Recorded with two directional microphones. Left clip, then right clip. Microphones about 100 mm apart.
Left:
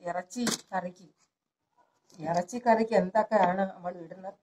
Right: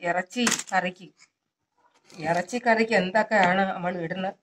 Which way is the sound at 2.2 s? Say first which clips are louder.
Right 4 dB; 25° right (ahead or behind).